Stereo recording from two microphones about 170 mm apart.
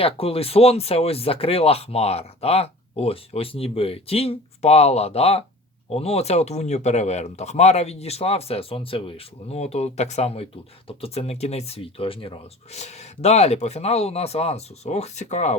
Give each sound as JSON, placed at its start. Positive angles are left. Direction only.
{"t": 0.0, "sound": "speech", "side_deg": 35}